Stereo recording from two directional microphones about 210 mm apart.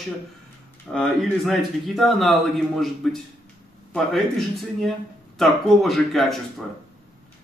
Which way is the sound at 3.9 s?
Centre (ahead or behind).